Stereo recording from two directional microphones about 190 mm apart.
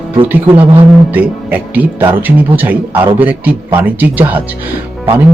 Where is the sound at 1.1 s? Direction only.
10° right (ahead or behind).